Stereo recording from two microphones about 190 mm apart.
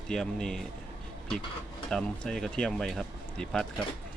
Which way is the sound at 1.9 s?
5° left (ahead or behind).